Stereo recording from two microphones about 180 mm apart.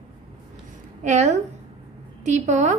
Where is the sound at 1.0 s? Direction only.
40° right (ahead or behind).